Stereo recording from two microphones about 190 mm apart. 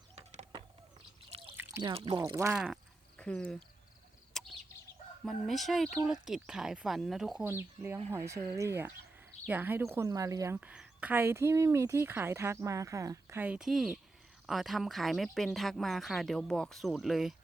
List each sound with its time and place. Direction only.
0.2 s a sound: 35° right (ahead or behind)
1.8 s speech: 30° right (ahead or behind)
2.2 s a woman's voice: 15° right (ahead or behind)
2.5 s speech: 5° right (ahead or behind)
4.4 s chicken: centre (ahead or behind)
5.2 s speech: centre (ahead or behind)
7.4 s a woman's voice: 10° right (ahead or behind)